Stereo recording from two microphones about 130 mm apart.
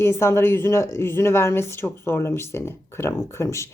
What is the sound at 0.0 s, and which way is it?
A woman's voice, 20° left (ahead or behind).